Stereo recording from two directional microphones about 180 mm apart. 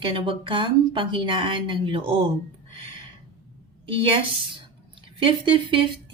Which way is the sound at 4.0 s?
30° right (ahead or behind).